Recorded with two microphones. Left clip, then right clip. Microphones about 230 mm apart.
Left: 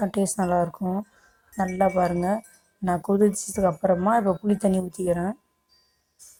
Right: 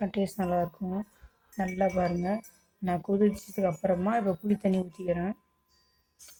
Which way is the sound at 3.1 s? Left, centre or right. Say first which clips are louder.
Left 6 dB; centre.